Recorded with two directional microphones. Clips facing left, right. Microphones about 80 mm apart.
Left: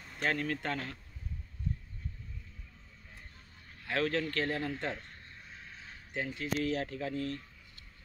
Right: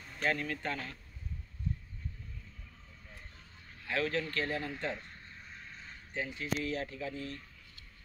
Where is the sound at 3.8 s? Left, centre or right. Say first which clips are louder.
Left 2 dB; left.